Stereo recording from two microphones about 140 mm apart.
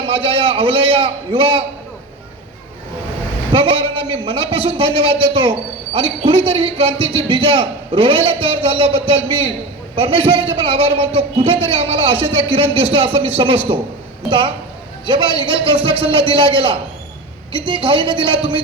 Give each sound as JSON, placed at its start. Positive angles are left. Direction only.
{"t": 0.0, "sound": "a man's voice", "side_deg": -40}
{"t": 3.5, "sound": "a man's voice", "side_deg": -40}